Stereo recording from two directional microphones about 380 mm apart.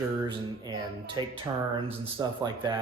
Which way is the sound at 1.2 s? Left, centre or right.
Centre.